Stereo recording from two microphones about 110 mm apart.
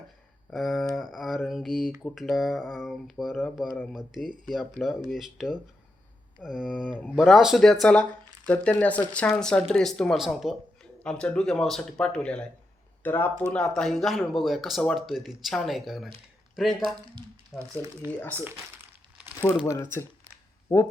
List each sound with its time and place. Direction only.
0.5 s speech: centre (ahead or behind)
11.0 s speech: 10° left (ahead or behind)
17.5 s speech: 20° left (ahead or behind)
18.3 s speech: 20° right (ahead or behind)
19.6 s speech: 25° left (ahead or behind)